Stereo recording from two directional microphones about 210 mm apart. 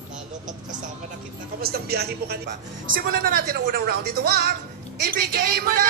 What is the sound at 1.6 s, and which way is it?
A man's voice, 50° right (ahead or behind).